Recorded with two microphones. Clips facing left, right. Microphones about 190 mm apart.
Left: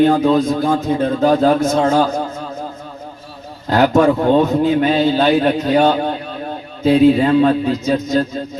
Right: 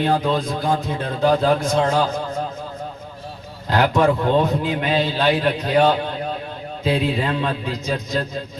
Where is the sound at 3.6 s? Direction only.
45° left (ahead or behind).